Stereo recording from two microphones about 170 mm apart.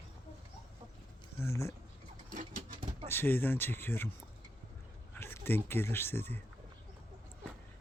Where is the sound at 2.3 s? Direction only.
50° right (ahead or behind).